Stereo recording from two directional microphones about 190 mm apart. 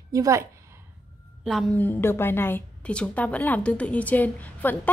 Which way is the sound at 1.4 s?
Centre (ahead or behind).